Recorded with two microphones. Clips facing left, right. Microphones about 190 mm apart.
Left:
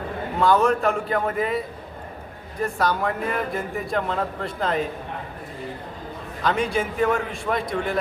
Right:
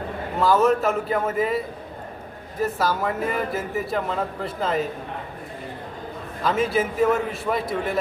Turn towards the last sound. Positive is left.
turn(degrees=-5)  # may be behind; listen again after turning